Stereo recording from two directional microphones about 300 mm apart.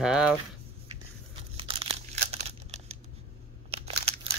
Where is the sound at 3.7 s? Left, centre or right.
Centre.